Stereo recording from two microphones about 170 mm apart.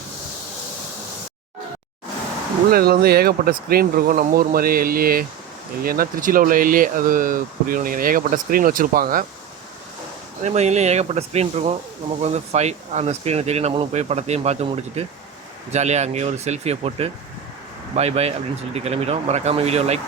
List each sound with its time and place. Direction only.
2.7 s speech: 65° right (ahead or behind)
10.4 s speech: 40° right (ahead or behind)